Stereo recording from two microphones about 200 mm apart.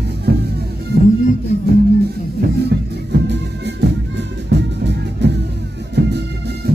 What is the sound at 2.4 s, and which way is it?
Music, 55° right (ahead or behind).